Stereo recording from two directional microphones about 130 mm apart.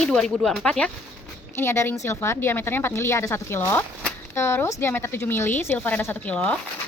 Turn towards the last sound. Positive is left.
turn(degrees=10)  # may be behind; listen again after turning